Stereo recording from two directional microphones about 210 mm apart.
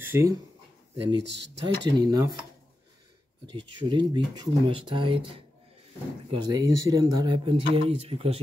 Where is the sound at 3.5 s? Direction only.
20° right (ahead or behind).